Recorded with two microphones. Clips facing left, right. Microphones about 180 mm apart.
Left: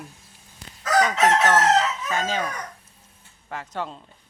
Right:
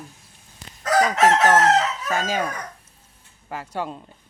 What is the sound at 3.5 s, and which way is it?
Speech, 10° right (ahead or behind).